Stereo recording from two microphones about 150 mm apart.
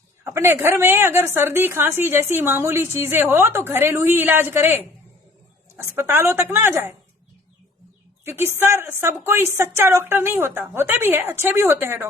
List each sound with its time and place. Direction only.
0.3 s a woman's voice: 20° right (ahead or behind)
8.2 s a woman's voice: 15° right (ahead or behind)